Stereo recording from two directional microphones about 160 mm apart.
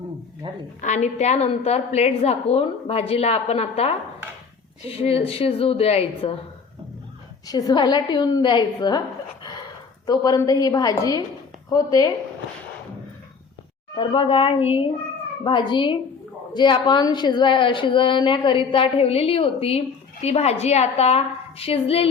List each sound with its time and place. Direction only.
0.4 s a woman's voice: 30° right (ahead or behind)
0.8 s a woman's voice: 45° left (ahead or behind)
7.4 s a woman's voice: 25° left (ahead or behind)
10.1 s a woman's voice: 25° left (ahead or behind)
13.9 s a woman's voice: 30° left (ahead or behind)